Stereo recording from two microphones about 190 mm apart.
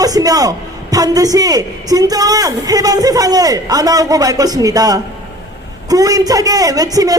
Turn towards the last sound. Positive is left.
turn(degrees=-20)  # may be behind; listen again after turning